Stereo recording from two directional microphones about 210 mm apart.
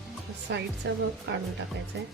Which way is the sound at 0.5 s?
55° right (ahead or behind).